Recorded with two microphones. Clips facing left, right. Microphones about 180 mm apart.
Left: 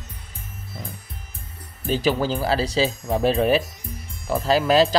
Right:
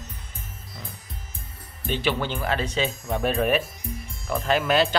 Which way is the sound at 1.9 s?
35° left (ahead or behind).